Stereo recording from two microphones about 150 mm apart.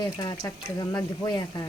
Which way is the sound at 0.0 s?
30° left (ahead or behind).